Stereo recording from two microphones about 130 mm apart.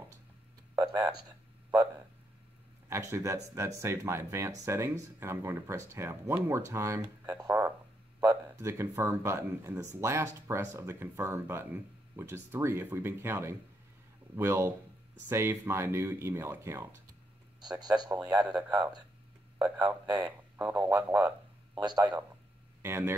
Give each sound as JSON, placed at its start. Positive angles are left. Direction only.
{"t": 0.7, "sound": "speech", "side_deg": -15}
{"t": 2.9, "sound": "speech", "side_deg": -25}
{"t": 8.2, "sound": "speech", "side_deg": -15}
{"t": 17.6, "sound": "a man's voice", "side_deg": -30}
{"t": 18.1, "sound": "speech", "side_deg": -15}
{"t": 21.7, "sound": "a man's voice", "side_deg": -30}
{"t": 22.8, "sound": "speech", "side_deg": -20}